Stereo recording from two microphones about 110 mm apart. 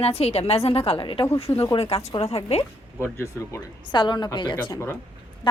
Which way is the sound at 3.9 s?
45° left (ahead or behind).